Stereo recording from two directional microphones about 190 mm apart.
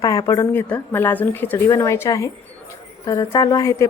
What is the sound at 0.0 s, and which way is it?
A woman's voice, 20° left (ahead or behind).